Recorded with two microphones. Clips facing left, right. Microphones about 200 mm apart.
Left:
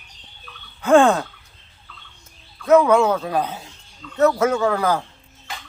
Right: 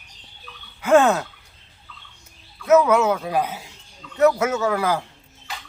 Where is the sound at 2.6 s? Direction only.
30° left (ahead or behind).